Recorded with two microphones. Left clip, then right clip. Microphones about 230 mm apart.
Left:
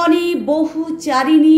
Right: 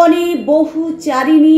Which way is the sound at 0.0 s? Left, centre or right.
Left.